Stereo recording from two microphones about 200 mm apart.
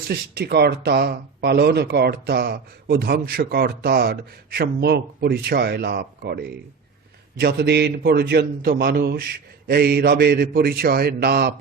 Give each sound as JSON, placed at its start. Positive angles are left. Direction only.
{"t": 0.1, "sound": "speech", "side_deg": -55}